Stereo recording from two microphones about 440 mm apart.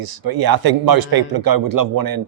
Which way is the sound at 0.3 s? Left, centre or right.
Right.